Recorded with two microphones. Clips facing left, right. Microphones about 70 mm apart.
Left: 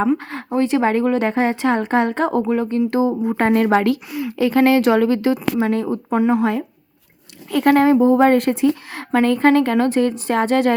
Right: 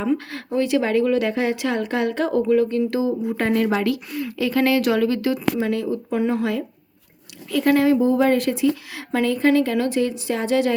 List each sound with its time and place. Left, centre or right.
0.2 s speech: left
4.3 s speech: left
7.5 s speech: left